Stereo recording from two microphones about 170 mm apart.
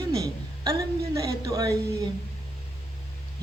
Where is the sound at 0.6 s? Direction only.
20° right (ahead or behind).